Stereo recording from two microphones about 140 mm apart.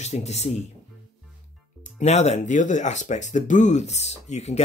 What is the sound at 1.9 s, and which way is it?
Speech, 55° left (ahead or behind).